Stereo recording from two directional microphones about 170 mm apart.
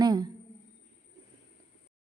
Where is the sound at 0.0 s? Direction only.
25° right (ahead or behind).